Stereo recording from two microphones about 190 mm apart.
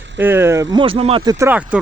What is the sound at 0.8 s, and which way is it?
Speech, 30° right (ahead or behind).